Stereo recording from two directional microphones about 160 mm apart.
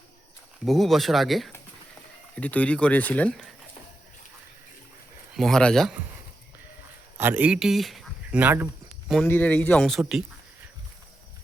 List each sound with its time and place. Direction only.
0.6 s speech: centre (ahead or behind)
5.3 s speech: centre (ahead or behind)
7.2 s speech: 10° right (ahead or behind)
9.2 s speech: 10° left (ahead or behind)